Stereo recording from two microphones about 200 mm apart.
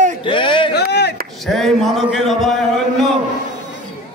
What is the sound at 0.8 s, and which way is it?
Speech, 55° left (ahead or behind).